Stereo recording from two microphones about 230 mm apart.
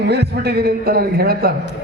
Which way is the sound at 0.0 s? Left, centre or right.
Right.